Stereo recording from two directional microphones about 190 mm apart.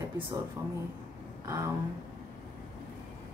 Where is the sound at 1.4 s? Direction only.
15° right (ahead or behind).